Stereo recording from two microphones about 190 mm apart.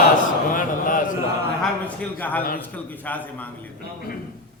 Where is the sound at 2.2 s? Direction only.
10° left (ahead or behind).